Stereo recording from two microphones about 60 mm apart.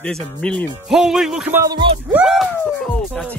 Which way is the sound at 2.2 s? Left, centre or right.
Centre.